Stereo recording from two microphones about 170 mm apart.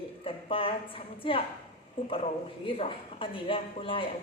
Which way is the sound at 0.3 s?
30° left (ahead or behind).